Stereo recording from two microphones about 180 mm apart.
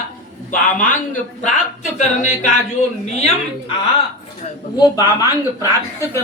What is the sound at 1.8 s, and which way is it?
A woman's voice, 40° left (ahead or behind).